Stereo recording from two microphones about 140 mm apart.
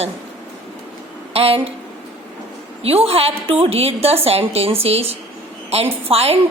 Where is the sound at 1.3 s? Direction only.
45° right (ahead or behind).